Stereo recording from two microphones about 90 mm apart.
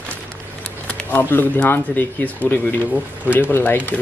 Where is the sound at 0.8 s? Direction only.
20° left (ahead or behind).